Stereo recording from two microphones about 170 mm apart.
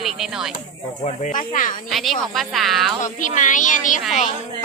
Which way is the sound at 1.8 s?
Centre (ahead or behind).